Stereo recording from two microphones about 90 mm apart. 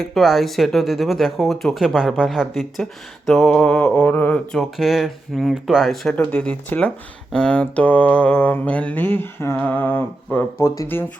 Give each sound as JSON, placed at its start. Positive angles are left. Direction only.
{"t": 0.0, "sound": "speech", "side_deg": 0}
{"t": 3.2, "sound": "mantra", "side_deg": 5}
{"t": 4.5, "sound": "speech", "side_deg": -5}
{"t": 6.1, "sound": "mantra", "side_deg": 15}
{"t": 9.6, "sound": "a sound", "side_deg": 20}